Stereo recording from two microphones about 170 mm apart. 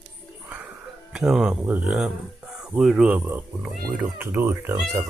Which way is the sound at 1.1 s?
5° right (ahead or behind).